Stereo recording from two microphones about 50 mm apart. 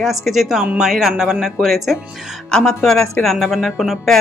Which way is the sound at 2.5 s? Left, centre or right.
Centre.